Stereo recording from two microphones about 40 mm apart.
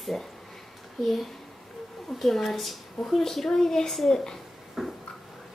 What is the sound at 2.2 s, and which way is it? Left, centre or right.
Speech, centre.